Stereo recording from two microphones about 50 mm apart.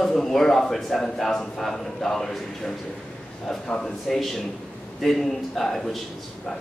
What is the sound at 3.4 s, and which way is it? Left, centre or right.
A man's voice, centre.